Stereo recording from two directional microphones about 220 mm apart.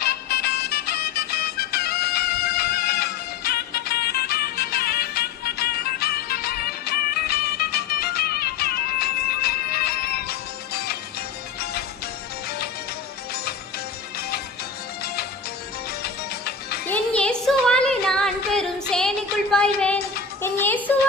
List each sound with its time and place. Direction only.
0.0 s music: 45° left (ahead or behind)
14.2 s music: 45° left (ahead or behind)
16.8 s music: 5° left (ahead or behind)